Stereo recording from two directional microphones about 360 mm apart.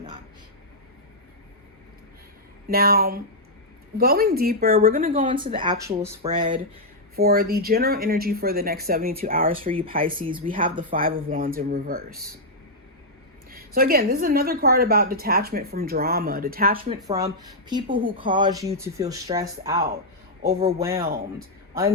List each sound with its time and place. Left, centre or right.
2.6 s speech: right
7.2 s speech: right
13.5 s speech: right
17.1 s speech: centre
20.4 s speech: right